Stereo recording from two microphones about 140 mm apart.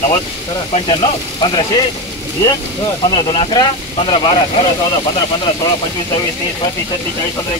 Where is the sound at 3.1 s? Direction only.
35° left (ahead or behind).